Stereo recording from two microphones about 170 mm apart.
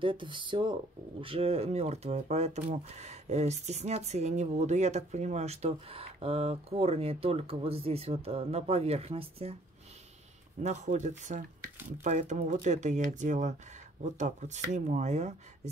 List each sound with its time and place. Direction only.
0.0 s speech: 30° right (ahead or behind)
10.6 s speech: 45° right (ahead or behind)